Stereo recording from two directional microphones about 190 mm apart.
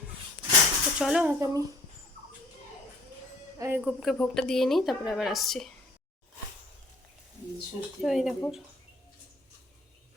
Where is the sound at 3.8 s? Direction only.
Centre (ahead or behind).